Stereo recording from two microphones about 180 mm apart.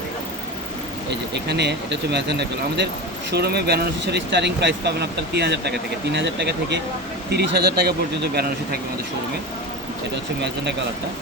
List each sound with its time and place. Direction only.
1.1 s speech: 70° right (ahead or behind)